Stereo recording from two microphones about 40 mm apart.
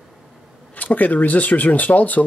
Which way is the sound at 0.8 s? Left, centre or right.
Left.